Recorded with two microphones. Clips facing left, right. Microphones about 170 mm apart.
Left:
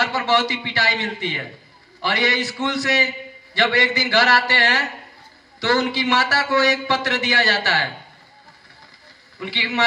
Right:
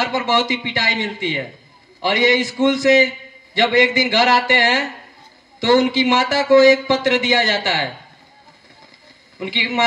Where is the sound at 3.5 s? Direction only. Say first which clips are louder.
Right 5 dB; 15° right (ahead or behind).